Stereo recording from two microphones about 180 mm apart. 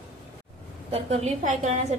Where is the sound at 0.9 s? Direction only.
35° right (ahead or behind).